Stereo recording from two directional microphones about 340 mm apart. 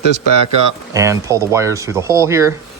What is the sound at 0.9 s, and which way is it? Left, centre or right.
Speech, centre.